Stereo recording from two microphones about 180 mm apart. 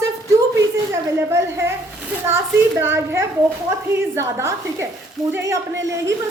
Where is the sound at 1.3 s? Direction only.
15° right (ahead or behind).